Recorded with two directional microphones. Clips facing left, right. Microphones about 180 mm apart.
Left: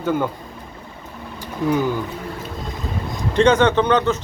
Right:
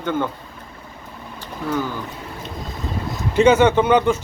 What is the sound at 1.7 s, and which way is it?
Speech, 15° left (ahead or behind).